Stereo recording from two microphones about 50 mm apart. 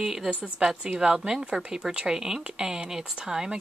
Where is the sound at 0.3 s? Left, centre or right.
Right.